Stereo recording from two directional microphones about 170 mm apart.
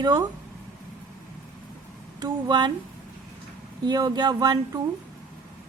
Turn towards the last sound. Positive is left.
turn(degrees=-25)  # may be behind; listen again after turning